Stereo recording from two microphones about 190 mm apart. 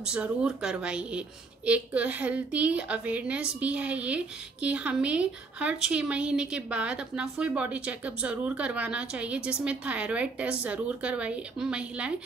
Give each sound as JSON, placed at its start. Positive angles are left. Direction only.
{"t": 0.0, "sound": "a woman's voice", "side_deg": -5}